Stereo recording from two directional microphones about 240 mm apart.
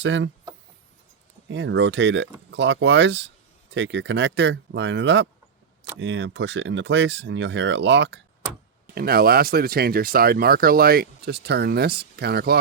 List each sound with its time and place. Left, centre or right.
0.0 s speech: right
1.5 s speech: right